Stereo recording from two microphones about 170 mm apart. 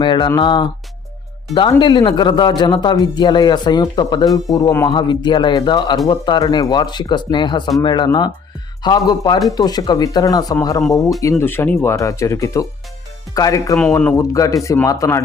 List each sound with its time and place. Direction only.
0.0 s speech: 25° left (ahead or behind)
1.8 s speech: 25° left (ahead or behind)